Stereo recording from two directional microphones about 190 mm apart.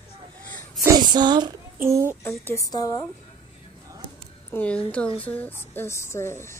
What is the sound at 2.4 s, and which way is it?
Speech, 15° left (ahead or behind).